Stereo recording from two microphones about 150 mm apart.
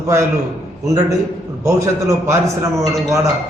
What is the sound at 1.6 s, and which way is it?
Speech, 20° right (ahead or behind).